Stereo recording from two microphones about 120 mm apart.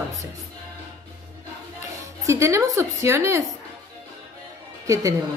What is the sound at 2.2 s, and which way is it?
A woman's voice, 25° right (ahead or behind).